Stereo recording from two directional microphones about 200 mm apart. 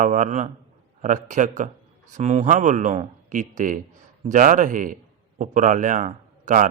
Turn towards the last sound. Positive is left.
turn(degrees=-40)  # may be behind; listen again after turning